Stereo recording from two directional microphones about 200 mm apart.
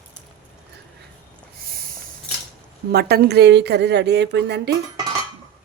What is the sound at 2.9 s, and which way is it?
Speech, 50° right (ahead or behind).